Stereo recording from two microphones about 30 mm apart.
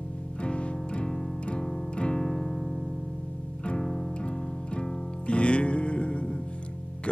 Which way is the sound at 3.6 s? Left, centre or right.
Left.